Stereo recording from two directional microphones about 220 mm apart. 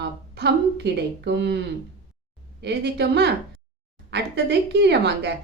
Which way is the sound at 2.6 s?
50° right (ahead or behind).